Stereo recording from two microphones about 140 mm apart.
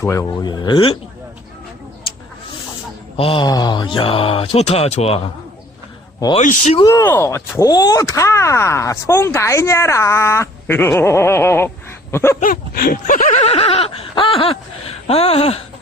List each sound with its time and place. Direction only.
0.0 s speech: 20° left (ahead or behind)
3.2 s speech: 40° left (ahead or behind)
6.4 s speech: 65° left (ahead or behind)
7.0 s speech: 15° left (ahead or behind)
12.1 s dog: 20° left (ahead or behind)
12.4 s a sound: 85° left
13.3 s a sound: 45° left (ahead or behind)